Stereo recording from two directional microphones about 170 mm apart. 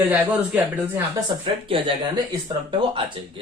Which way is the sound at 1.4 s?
30° right (ahead or behind).